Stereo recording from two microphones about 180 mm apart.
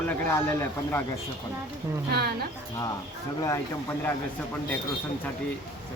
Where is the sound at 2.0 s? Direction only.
60° right (ahead or behind).